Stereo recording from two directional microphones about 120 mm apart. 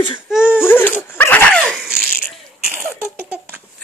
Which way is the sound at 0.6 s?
20° left (ahead or behind).